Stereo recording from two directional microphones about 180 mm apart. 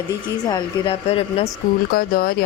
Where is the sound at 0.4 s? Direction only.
20° left (ahead or behind).